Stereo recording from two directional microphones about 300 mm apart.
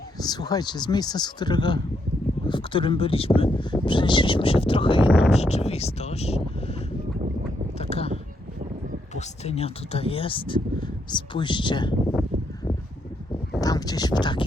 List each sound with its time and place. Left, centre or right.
0.2 s speech: centre
7.8 s a sound: centre
9.1 s speech: left
13.6 s speech: centre